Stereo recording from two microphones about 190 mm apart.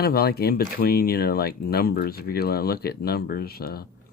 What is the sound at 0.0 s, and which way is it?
Speech, 55° left (ahead or behind).